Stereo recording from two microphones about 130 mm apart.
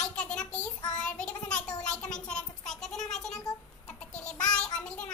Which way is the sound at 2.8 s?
5° left (ahead or behind).